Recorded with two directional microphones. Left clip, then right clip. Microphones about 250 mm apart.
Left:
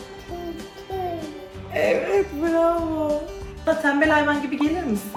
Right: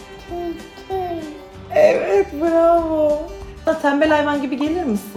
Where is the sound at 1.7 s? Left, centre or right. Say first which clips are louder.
Right 7 dB; right.